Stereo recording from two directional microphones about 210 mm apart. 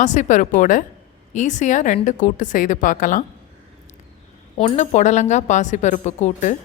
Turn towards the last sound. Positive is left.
turn(degrees=35)  # may be behind; listen again after turning